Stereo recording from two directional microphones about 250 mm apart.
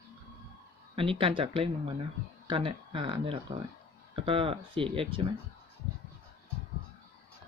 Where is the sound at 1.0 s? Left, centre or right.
Right.